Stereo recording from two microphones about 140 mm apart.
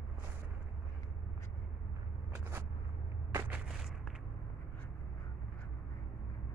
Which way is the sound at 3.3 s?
20° right (ahead or behind).